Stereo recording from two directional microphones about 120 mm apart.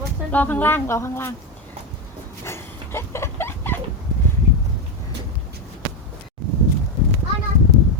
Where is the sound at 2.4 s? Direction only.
20° left (ahead or behind).